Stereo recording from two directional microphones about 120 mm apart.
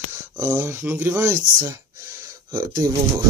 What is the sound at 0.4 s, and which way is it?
Speech, 20° right (ahead or behind).